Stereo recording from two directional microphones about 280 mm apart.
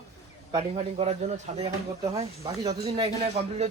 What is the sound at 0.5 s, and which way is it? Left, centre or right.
Speech, right.